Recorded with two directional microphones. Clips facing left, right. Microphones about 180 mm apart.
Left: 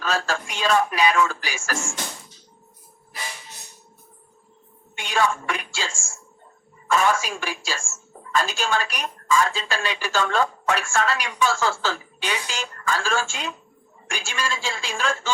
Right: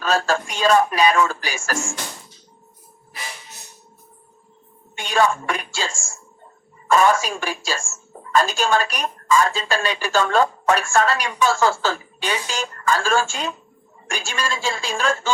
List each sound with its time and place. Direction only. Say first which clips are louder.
0.0 s a woman's voice: right 5 dB; 40° right (ahead or behind)
4.9 s a woman's voice: right 4 dB; 40° right (ahead or behind)